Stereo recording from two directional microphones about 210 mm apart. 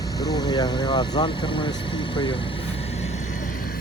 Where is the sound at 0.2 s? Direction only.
20° left (ahead or behind).